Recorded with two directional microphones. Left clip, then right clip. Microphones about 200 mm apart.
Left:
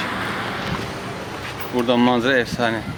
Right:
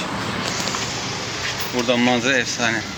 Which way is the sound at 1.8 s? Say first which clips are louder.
Left 1 dB; 25° left (ahead or behind).